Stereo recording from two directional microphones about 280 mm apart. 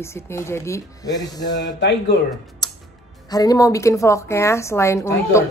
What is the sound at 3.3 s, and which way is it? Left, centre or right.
A woman's voice, centre.